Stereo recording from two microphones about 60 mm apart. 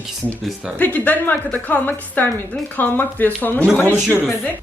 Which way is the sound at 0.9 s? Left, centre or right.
Left.